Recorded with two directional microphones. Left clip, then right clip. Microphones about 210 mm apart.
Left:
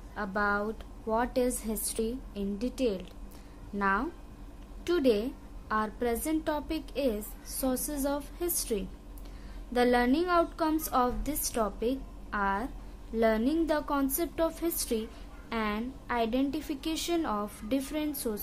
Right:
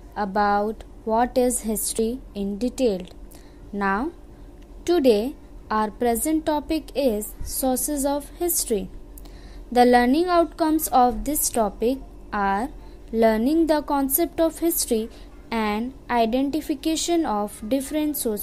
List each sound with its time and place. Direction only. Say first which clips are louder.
0.1 s a woman's voice: right 9 dB; 20° right (ahead or behind)